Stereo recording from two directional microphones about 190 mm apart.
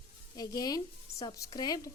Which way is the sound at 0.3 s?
20° left (ahead or behind).